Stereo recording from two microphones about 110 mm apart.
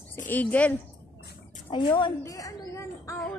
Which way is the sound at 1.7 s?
45° left (ahead or behind).